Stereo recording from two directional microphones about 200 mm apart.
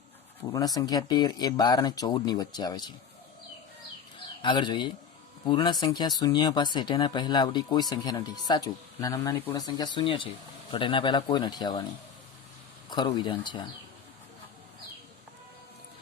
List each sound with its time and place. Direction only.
0.5 s speech: 20° left (ahead or behind)
4.4 s speech: 25° left (ahead or behind)
12.9 s speech: 20° left (ahead or behind)